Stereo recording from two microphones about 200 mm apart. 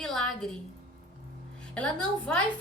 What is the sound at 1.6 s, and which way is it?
Speech, 5° left (ahead or behind).